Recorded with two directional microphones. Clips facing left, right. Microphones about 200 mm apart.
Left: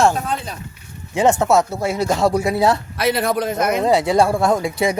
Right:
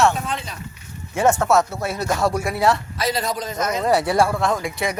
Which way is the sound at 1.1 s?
15° left (ahead or behind).